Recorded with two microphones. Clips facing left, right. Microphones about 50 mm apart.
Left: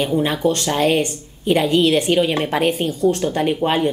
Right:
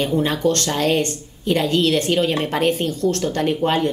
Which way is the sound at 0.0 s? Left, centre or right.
Centre.